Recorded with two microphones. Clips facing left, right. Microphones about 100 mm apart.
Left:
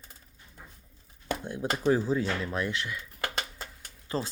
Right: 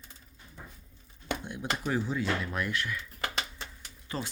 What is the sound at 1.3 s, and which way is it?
Speech, 40° left (ahead or behind).